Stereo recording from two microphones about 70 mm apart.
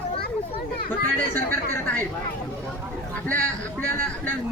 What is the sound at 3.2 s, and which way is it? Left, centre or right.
Speech, left.